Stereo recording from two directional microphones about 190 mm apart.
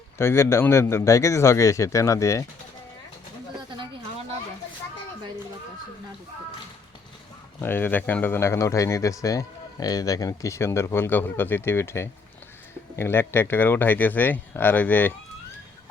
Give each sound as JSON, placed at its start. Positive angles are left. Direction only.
{"t": 0.2, "sound": "speech", "side_deg": 15}
{"t": 7.6, "sound": "speech", "side_deg": 10}